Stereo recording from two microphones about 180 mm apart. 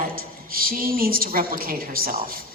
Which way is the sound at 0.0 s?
55° right (ahead or behind).